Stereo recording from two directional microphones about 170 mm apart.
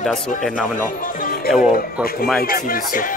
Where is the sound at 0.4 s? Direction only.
Centre (ahead or behind).